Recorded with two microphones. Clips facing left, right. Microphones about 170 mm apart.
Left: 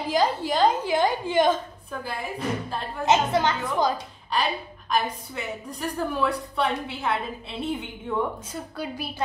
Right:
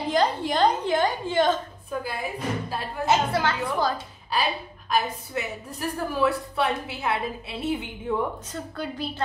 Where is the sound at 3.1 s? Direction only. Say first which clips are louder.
Left 2 dB; 20° left (ahead or behind).